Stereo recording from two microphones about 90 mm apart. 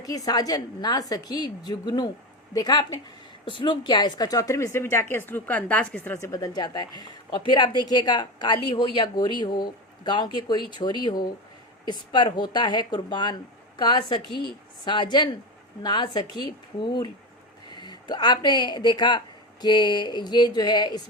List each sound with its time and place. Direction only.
0.0 s speech: 40° left (ahead or behind)
3.6 s a woman's voice: 60° left (ahead or behind); by 6.1 s 15° left (ahead or behind)
6.1 s speech: 40° left (ahead or behind)